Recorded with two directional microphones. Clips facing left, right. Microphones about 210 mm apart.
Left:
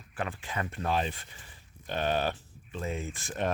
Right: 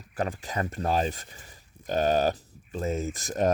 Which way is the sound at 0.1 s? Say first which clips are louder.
Right 5 dB; 40° right (ahead or behind).